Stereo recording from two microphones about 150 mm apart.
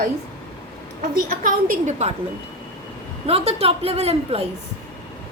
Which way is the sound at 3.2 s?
40° right (ahead or behind).